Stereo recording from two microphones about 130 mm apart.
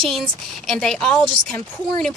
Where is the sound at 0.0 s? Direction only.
Centre (ahead or behind).